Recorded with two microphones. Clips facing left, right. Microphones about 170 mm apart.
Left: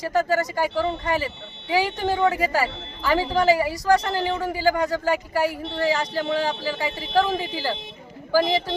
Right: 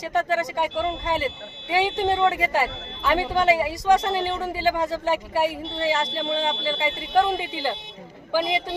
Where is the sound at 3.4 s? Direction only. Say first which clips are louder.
Left 1 dB; 25° right (ahead or behind).